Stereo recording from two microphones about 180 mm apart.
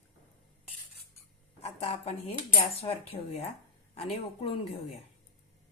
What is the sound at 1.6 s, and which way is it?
Speech, 35° left (ahead or behind).